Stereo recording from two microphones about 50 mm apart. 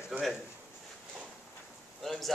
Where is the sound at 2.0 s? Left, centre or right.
Centre.